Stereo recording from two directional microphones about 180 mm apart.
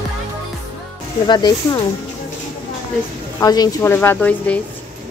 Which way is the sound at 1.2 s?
25° left (ahead or behind).